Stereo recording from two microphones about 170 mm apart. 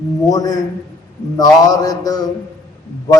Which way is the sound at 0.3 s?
20° left (ahead or behind).